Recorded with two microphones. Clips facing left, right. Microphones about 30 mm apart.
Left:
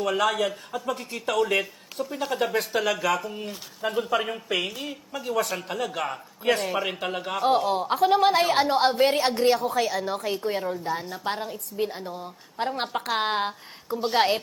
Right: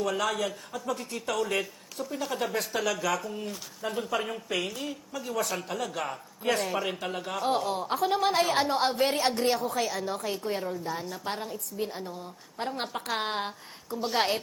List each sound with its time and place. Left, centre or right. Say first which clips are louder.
0.0 s a woman's voice: left 5 dB; left
10.0 s speech: left 4 dB; centre